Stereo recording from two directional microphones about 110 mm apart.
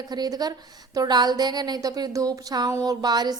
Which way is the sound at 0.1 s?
35° right (ahead or behind).